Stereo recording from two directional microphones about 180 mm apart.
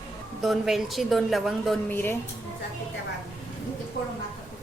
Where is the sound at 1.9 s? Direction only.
10° left (ahead or behind).